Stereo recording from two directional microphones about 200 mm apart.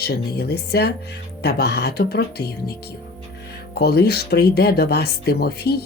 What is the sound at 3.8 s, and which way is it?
Speech, 50° left (ahead or behind).